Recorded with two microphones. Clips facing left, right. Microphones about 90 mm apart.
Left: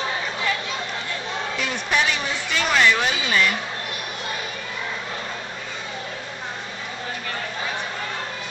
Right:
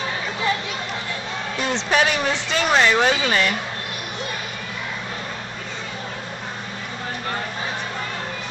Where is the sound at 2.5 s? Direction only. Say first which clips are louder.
Right 1 dB; 30° right (ahead or behind).